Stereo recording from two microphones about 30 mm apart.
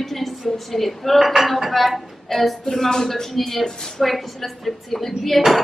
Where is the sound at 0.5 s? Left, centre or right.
Centre.